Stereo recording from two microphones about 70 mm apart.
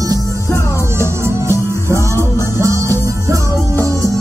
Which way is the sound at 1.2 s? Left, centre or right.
Right.